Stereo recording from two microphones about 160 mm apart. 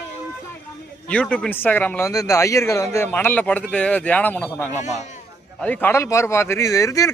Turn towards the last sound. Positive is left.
turn(degrees=20)  # may be behind; listen again after turning